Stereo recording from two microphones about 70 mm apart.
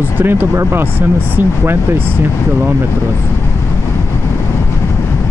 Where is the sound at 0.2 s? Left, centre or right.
Right.